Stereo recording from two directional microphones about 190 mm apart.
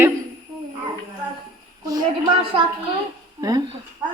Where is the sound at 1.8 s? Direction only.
20° right (ahead or behind).